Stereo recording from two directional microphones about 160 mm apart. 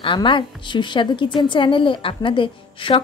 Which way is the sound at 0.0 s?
30° left (ahead or behind).